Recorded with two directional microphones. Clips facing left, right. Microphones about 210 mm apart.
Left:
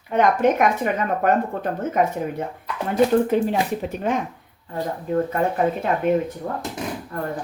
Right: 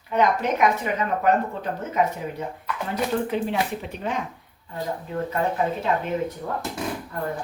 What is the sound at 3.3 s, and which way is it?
Speech, 45° left (ahead or behind).